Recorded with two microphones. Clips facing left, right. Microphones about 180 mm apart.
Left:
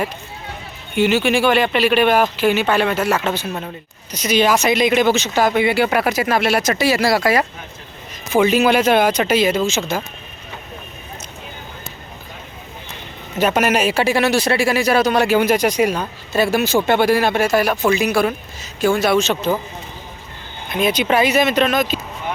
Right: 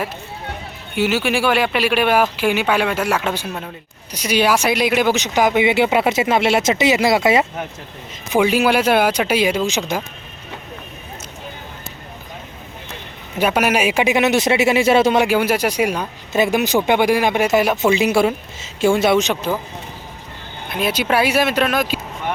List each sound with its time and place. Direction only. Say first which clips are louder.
0.9 s speech: left 3 dB; 5° right (ahead or behind); by 7.4 s 20° right (ahead or behind)
8.3 s speech: left 1 dB; 10° right (ahead or behind)
13.4 s speech: left 1 dB; 10° right (ahead or behind)
20.7 s speech: left 2 dB; 5° right (ahead or behind)